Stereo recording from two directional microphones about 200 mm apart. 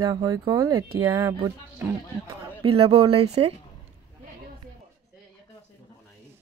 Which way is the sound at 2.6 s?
30° right (ahead or behind).